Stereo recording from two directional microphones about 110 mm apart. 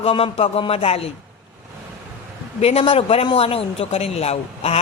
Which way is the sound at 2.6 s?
65° left (ahead or behind).